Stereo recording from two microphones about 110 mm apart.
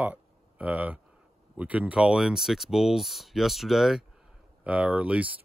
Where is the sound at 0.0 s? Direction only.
15° right (ahead or behind).